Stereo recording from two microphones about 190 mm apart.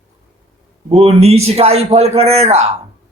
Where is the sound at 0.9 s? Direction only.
35° right (ahead or behind).